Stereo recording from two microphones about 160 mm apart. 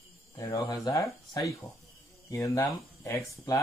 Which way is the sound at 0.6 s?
20° left (ahead or behind).